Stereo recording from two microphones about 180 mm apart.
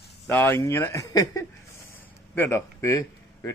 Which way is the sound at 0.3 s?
15° left (ahead or behind).